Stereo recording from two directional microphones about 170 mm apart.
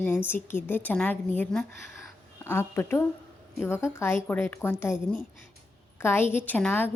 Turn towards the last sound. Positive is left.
turn(degrees=10)  # may be behind; listen again after turning